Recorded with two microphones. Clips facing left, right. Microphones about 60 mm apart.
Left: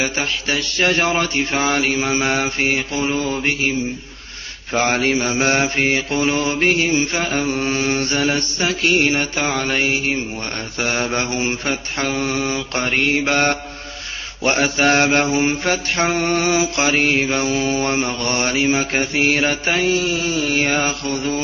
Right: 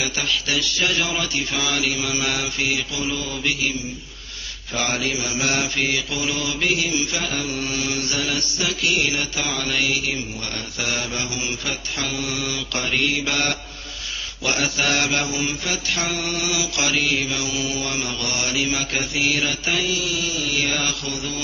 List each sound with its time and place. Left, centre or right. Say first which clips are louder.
0.0 s mantra: left 3 dB; left
4.7 s mantra: left 7 dB; left